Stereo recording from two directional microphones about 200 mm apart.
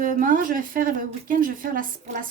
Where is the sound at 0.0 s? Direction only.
40° right (ahead or behind).